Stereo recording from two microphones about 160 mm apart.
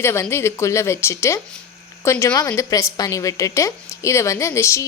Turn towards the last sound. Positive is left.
turn(degrees=20)  # may be behind; listen again after turning